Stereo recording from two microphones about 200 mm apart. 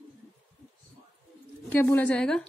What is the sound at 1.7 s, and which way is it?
Speech, 5° left (ahead or behind).